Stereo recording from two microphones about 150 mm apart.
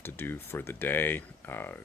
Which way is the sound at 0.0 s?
15° left (ahead or behind).